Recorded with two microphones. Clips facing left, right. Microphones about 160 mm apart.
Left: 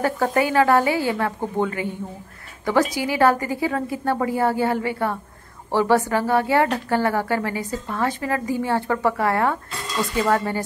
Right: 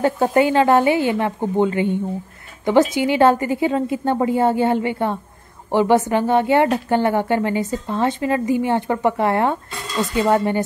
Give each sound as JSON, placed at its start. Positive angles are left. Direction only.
{"t": 0.0, "sound": "a woman's voice", "side_deg": -25}